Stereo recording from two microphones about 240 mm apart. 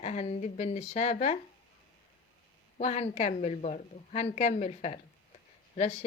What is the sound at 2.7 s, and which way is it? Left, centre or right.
Speech, left.